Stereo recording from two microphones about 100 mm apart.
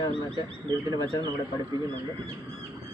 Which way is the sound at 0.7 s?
45° right (ahead or behind).